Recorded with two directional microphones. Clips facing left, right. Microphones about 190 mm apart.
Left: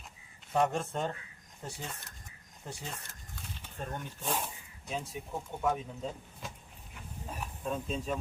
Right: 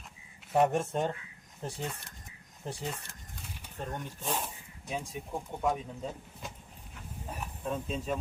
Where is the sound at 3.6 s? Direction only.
10° right (ahead or behind).